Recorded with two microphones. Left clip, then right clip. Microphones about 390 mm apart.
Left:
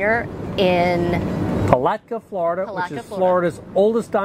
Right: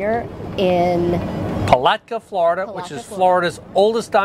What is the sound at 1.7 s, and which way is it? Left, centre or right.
Speech, right.